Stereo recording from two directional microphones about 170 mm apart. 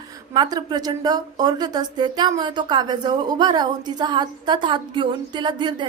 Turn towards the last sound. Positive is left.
turn(degrees=-25)  # may be behind; listen again after turning